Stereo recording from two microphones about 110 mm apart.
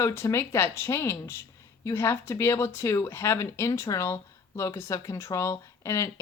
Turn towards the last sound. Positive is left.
turn(degrees=30)  # may be behind; listen again after turning